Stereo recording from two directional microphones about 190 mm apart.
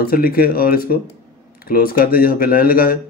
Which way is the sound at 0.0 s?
50° left (ahead or behind).